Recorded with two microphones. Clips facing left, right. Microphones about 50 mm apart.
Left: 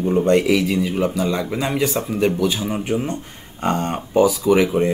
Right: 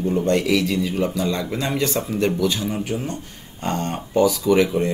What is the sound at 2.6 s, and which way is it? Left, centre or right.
Speech, left.